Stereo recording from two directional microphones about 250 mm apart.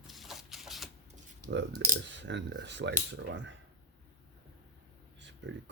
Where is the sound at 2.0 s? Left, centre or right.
Right.